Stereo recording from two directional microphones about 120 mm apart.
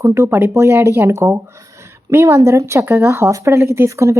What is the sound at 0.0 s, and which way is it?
Speech, 20° right (ahead or behind).